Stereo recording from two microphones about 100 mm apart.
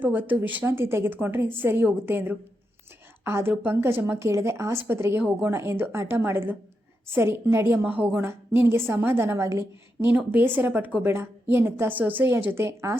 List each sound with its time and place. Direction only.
0.0 s a woman's voice: 15° right (ahead or behind)